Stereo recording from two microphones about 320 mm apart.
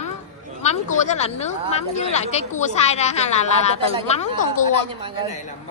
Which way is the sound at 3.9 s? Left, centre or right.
Left.